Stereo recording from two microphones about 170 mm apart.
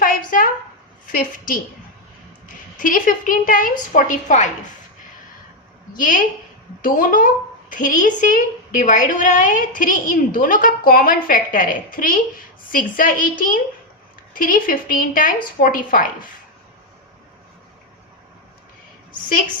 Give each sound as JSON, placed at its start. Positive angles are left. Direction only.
{"t": 0.0, "sound": "a sound", "side_deg": 55}
{"t": 1.0, "sound": "a woman's voice", "side_deg": 55}
{"t": 2.7, "sound": "a woman's voice", "side_deg": 50}
{"t": 5.9, "sound": "a woman's voice", "side_deg": 55}